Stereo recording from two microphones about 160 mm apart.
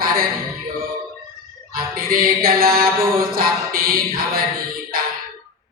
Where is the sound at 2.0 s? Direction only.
65° right (ahead or behind).